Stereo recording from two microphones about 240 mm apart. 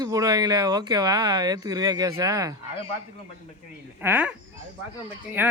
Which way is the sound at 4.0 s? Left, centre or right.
Centre.